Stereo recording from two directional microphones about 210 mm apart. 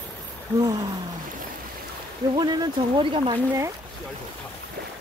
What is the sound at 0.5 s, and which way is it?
Speech, 15° right (ahead or behind).